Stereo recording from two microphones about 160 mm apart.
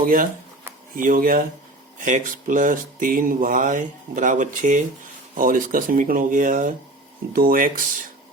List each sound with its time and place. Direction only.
0.0 s speech: 60° right (ahead or behind)